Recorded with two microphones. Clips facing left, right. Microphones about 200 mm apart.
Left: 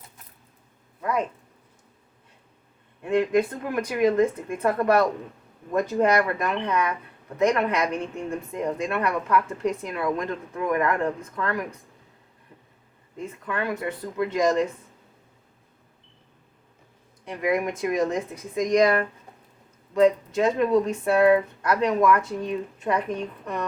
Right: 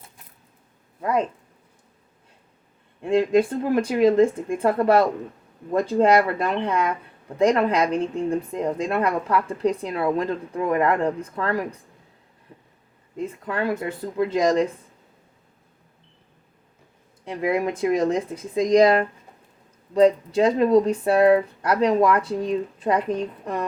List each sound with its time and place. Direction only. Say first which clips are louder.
3.0 s a woman's voice: right 3 dB; 30° right (ahead or behind)
13.1 s a woman's voice: right 3 dB; 30° right (ahead or behind)
17.2 s a woman's voice: right 2 dB; 30° right (ahead or behind)